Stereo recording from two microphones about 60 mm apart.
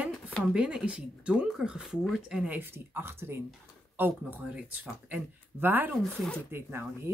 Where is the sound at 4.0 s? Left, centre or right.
Right.